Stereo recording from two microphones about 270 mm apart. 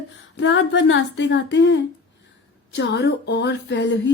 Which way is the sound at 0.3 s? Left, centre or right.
Left.